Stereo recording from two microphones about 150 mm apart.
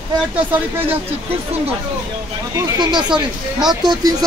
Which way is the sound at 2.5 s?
30° right (ahead or behind).